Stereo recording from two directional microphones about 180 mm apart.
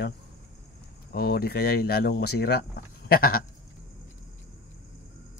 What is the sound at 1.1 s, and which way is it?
Speech, 60° left (ahead or behind).